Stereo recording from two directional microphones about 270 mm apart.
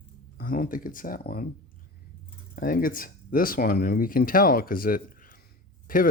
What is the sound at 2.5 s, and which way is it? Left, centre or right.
Speech, left.